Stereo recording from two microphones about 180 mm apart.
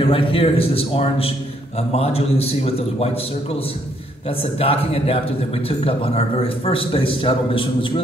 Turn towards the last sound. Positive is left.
turn(degrees=30)  # may be behind; listen again after turning